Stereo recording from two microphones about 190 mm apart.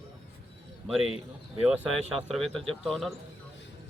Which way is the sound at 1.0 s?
30° left (ahead or behind).